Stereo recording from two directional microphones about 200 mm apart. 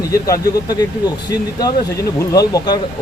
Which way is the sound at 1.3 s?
20° left (ahead or behind).